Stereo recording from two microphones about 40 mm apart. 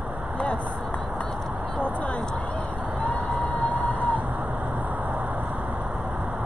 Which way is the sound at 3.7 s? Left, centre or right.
Left.